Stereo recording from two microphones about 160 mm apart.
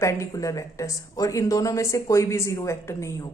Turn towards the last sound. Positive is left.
turn(degrees=20)  # may be behind; listen again after turning